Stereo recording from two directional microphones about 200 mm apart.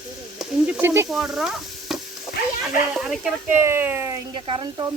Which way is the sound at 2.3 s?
Centre (ahead or behind).